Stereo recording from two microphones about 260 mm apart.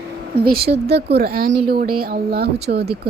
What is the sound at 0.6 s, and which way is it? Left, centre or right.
A woman's voice, right.